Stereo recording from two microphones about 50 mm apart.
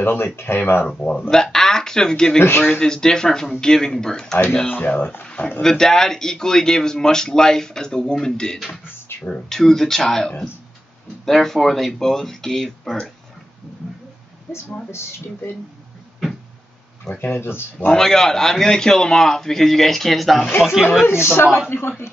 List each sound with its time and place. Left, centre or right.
0.0 s speech: left
0.8 s speech: left
1.3 s speech: centre
2.4 s speech: left
2.8 s speech: centre
4.6 s speech: left
5.2 s speech: left
5.6 s speech: centre
17.2 s speech: left
17.9 s speech: centre
21.1 s a woman's voice: left
21.6 s speech: left